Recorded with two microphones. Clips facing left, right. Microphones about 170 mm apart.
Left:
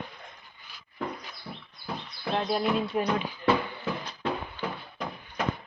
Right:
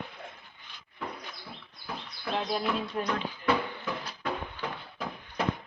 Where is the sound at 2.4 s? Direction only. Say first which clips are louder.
Left 3 dB; centre (ahead or behind).